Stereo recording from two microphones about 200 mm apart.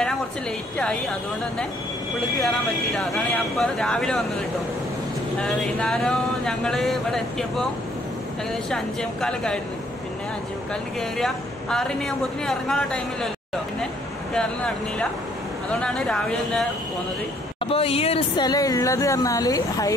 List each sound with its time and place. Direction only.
3.2 s a woman's voice: 5° left (ahead or behind)
5.4 s a woman's voice: centre (ahead or behind)
8.6 s a woman's voice: 5° left (ahead or behind)
10.7 s a woman's voice: centre (ahead or behind)
14.3 s a woman's voice: 5° left (ahead or behind)
17.6 s speech: 30° left (ahead or behind)